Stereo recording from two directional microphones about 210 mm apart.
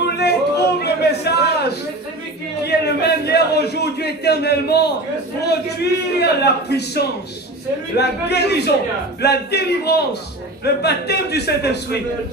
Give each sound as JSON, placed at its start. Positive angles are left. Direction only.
{"t": 0.0, "sound": "yodeling", "side_deg": 50}
{"t": 0.8, "sound": "a sound", "side_deg": 50}
{"t": 5.4, "sound": "a man's voice", "side_deg": 50}